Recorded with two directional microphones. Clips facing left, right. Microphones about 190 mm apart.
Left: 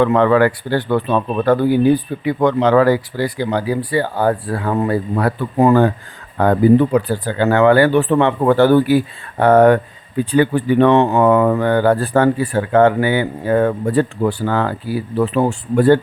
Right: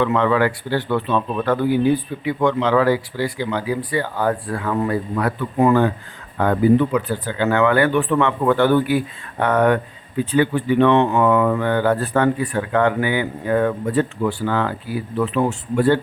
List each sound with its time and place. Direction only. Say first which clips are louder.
0.0 s speech: left 5 dB; 45° left (ahead or behind)